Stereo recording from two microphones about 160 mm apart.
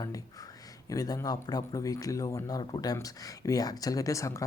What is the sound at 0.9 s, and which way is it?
Speech, 25° left (ahead or behind).